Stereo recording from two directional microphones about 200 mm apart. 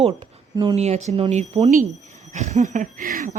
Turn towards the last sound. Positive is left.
turn(degrees=-45)  # may be behind; listen again after turning